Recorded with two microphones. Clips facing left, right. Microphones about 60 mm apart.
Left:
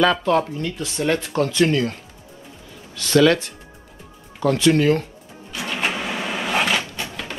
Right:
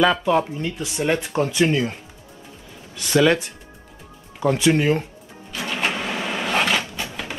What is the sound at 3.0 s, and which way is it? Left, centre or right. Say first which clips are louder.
Speech: left 2 dB; centre.